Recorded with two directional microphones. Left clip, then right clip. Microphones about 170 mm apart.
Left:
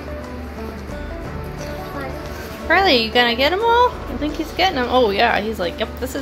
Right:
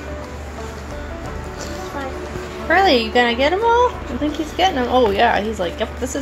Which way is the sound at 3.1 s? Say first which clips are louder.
Even; 15° right (ahead or behind).